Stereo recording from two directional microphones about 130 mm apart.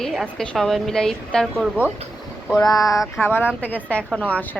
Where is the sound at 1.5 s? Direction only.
10° right (ahead or behind).